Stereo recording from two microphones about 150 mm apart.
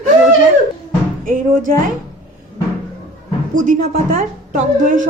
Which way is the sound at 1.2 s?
65° right (ahead or behind).